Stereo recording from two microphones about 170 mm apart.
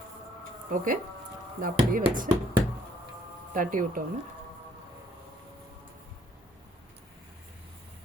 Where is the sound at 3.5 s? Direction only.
55° right (ahead or behind).